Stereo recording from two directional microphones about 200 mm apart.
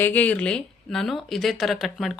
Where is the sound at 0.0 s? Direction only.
10° left (ahead or behind).